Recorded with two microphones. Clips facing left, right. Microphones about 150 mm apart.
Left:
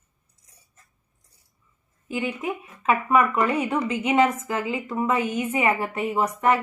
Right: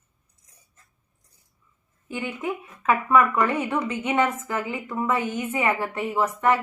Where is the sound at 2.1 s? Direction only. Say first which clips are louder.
Left 2 dB; 15° left (ahead or behind).